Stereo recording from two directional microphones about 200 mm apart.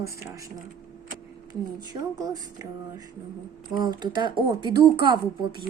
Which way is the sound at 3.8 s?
20° right (ahead or behind).